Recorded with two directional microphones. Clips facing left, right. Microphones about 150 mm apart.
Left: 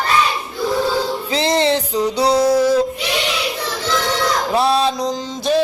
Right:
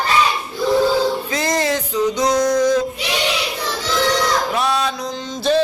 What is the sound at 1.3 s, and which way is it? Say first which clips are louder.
Music: left 3 dB; 25° left (ahead or behind).